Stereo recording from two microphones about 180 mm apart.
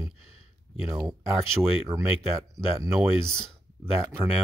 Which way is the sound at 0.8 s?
15° right (ahead or behind).